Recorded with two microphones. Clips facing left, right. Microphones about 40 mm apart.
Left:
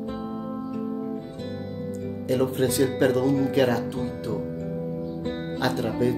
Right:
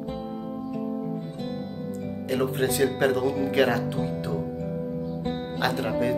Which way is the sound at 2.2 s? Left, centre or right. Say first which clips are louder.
Left 2 dB; centre.